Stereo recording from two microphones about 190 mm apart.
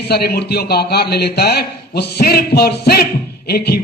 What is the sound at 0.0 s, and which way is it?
A man's voice, 55° left (ahead or behind).